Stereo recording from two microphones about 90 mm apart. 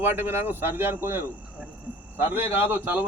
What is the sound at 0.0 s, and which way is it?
A man's voice, 25° right (ahead or behind).